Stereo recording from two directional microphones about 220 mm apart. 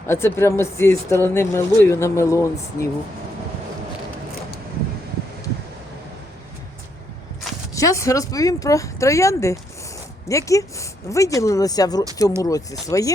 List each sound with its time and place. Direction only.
0.1 s speech: 10° left (ahead or behind)
7.8 s speech: 15° left (ahead or behind)